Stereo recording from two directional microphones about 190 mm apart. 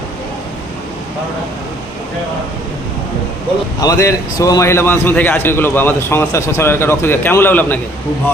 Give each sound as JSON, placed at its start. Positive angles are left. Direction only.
{"t": 3.8, "sound": "a man's voice", "side_deg": 15}